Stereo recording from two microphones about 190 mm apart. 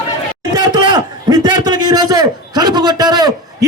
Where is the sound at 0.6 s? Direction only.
20° right (ahead or behind).